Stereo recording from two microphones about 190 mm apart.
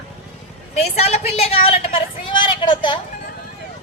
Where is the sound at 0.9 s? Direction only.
35° left (ahead or behind).